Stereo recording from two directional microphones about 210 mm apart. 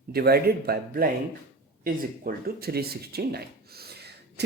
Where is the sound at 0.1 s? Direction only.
50° right (ahead or behind).